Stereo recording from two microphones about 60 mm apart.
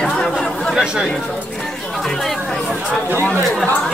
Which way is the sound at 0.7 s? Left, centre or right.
Centre.